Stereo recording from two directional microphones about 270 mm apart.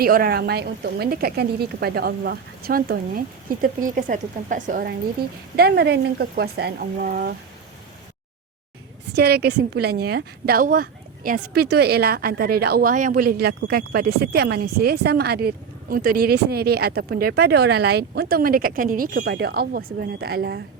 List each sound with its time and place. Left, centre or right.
0.0 s a woman's voice: right
9.1 s a woman's voice: right